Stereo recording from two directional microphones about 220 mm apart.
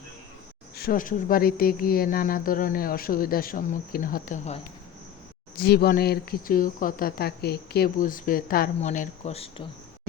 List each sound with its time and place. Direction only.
0.8 s speech: 40° left (ahead or behind)
5.5 s speech: 45° left (ahead or behind); by 9.6 s 25° left (ahead or behind)